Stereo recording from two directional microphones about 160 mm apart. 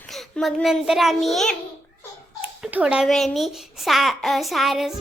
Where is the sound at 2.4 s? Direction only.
10° right (ahead or behind).